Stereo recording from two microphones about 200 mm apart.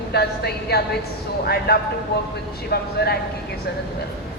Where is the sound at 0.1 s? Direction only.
55° left (ahead or behind).